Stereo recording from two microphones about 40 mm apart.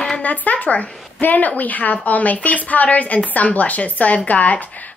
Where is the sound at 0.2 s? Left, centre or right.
Left.